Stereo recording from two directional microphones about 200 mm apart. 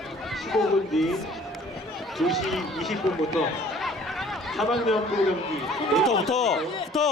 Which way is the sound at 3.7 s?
Centre (ahead or behind).